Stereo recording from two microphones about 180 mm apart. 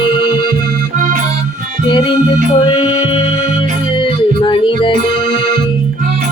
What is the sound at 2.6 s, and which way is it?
Music, 25° left (ahead or behind).